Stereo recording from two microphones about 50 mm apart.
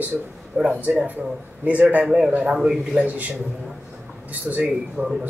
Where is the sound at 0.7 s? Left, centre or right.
Right.